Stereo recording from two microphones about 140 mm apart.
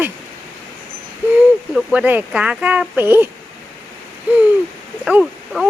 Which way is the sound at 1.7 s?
10° right (ahead or behind).